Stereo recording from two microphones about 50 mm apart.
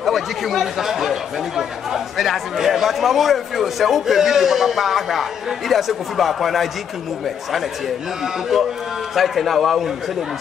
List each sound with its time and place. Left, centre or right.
0.0 s speech: centre
8.2 s speech: centre